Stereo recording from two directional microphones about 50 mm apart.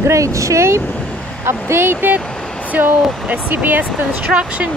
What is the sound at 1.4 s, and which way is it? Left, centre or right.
Speech, right.